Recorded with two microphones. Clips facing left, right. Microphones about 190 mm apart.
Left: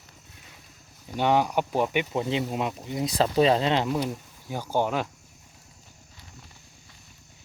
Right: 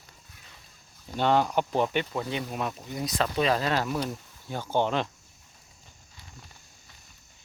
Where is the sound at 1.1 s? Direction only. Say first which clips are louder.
Left 1 dB; 10° left (ahead or behind).